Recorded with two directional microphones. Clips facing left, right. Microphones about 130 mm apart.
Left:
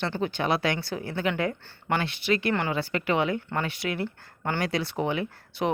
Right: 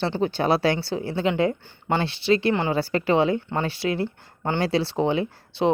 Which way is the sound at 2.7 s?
35° right (ahead or behind).